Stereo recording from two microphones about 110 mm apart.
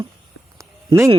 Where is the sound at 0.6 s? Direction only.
25° right (ahead or behind).